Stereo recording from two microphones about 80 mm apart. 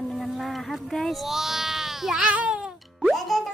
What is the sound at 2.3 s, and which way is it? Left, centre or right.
Music, centre.